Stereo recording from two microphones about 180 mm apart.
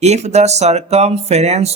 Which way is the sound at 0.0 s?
40° right (ahead or behind).